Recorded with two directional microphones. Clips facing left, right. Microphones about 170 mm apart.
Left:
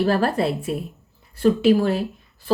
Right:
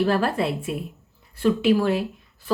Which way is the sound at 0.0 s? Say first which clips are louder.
Left 2 dB; 40° left (ahead or behind).